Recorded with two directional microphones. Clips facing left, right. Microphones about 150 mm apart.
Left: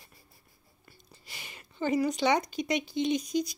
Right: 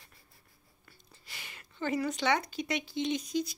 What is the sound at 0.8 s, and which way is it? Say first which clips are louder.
A woman's voice: left 4 dB; 15° left (ahead or behind).